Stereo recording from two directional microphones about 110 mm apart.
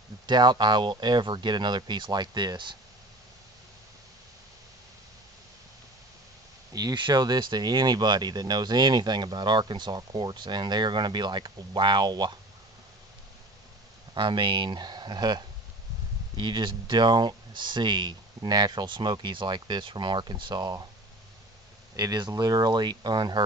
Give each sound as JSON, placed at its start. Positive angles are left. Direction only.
{"t": 0.3, "sound": "speech", "side_deg": -40}
{"t": 6.7, "sound": "speech", "side_deg": -35}
{"t": 14.1, "sound": "speech", "side_deg": -45}
{"t": 21.9, "sound": "speech", "side_deg": -35}